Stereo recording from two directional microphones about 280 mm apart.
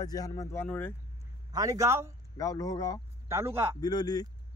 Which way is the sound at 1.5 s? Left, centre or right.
Centre.